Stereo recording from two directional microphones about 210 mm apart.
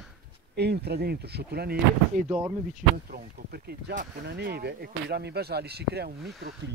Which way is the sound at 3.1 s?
45° right (ahead or behind).